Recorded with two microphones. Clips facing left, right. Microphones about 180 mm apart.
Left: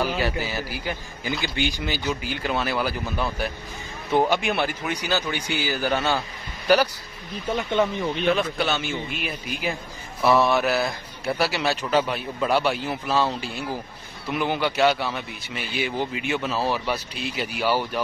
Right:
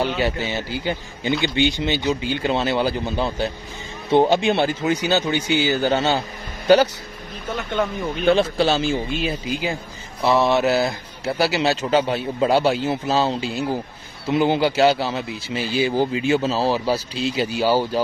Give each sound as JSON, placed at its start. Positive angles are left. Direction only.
{"t": 0.2, "sound": "a man's voice", "side_deg": -25}
{"t": 7.5, "sound": "speech", "side_deg": 10}
{"t": 8.3, "sound": "a man's voice", "side_deg": -30}